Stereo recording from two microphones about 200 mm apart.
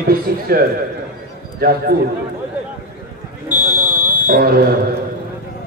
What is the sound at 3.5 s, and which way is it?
Fire alarm, 20° left (ahead or behind).